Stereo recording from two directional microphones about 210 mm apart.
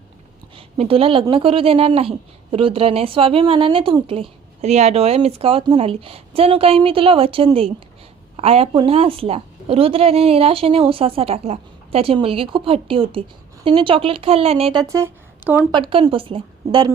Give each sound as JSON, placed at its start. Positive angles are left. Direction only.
{"t": 0.5, "sound": "speech", "side_deg": -25}
{"t": 15.7, "sound": "speech", "side_deg": -25}